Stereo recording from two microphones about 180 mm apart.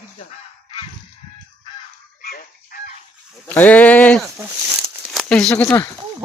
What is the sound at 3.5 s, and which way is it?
Speech, 10° left (ahead or behind).